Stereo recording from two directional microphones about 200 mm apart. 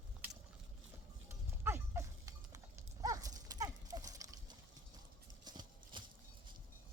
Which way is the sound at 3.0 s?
15° right (ahead or behind).